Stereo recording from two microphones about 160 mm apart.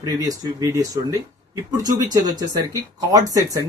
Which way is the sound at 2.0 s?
20° right (ahead or behind).